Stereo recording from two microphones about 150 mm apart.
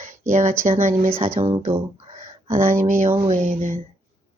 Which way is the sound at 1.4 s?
35° right (ahead or behind).